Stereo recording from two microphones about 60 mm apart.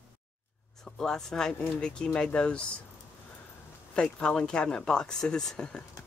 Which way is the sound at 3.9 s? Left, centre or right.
Centre.